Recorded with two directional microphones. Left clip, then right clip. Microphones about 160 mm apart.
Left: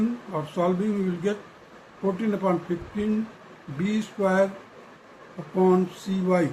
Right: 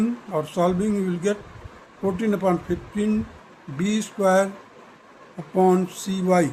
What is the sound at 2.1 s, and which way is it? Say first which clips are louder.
Speech: right 4 dB; 90° right.